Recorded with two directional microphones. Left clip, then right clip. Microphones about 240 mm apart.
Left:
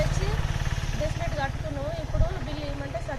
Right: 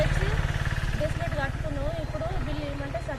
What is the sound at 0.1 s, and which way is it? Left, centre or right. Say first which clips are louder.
Vehicle: right 2 dB; right.